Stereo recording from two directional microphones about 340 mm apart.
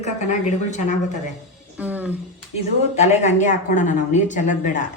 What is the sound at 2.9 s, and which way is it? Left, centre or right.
Speech, centre.